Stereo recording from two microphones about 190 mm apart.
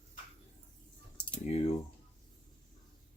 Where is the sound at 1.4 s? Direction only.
35° left (ahead or behind).